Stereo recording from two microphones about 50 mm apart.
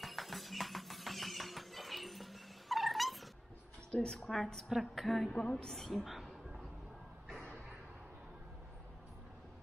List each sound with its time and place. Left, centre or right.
0.0 s music: centre
3.9 s a woman's voice: centre
4.2 s a woman's voice: centre
5.9 s a sound: centre